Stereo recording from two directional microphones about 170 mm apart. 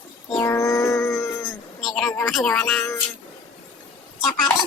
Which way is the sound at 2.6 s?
15° left (ahead or behind).